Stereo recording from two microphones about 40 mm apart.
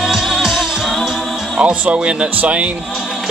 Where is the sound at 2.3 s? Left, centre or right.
Right.